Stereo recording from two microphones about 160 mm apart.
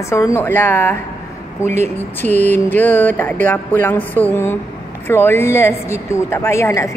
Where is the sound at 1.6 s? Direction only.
45° right (ahead or behind).